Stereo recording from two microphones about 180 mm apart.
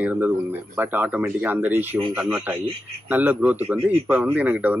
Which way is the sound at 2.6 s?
35° right (ahead or behind).